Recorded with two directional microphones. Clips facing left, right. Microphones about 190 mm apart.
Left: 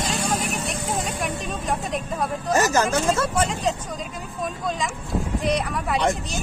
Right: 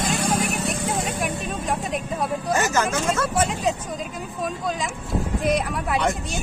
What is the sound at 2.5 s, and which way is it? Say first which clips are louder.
Speech: left 3 dB; 35° left (ahead or behind).